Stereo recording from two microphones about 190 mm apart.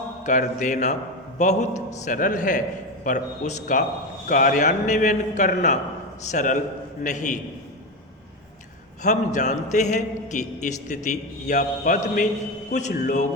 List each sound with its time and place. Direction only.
0.3 s a man's voice: 40° left (ahead or behind)
9.0 s a man's voice: 40° left (ahead or behind)